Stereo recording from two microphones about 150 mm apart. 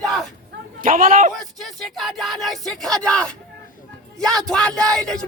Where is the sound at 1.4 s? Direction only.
Centre (ahead or behind).